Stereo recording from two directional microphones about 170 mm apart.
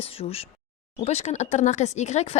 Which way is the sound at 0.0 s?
35° left (ahead or behind).